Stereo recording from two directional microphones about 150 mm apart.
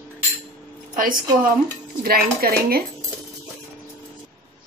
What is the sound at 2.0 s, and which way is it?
Speech, 90° right.